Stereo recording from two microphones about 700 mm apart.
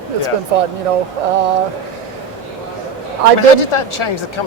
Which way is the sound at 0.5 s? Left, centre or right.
Right.